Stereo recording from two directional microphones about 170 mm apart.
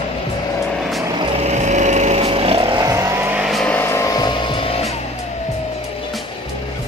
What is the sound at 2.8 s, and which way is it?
Vehicle, 20° right (ahead or behind).